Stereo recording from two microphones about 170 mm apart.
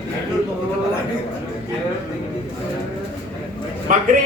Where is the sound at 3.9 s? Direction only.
50° right (ahead or behind).